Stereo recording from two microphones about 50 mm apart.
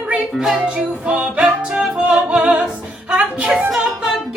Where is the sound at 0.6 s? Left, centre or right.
Right.